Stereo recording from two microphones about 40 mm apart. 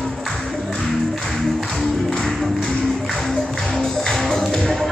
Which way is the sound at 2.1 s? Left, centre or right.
Centre.